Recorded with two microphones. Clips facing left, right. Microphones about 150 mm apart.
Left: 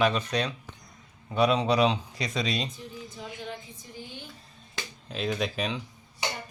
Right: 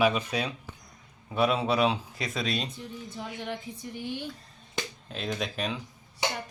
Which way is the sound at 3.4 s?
70° right (ahead or behind).